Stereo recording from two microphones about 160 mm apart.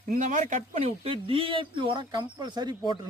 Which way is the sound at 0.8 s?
35° right (ahead or behind).